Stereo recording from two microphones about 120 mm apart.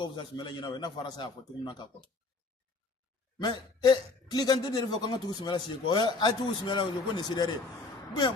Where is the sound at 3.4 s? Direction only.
35° left (ahead or behind).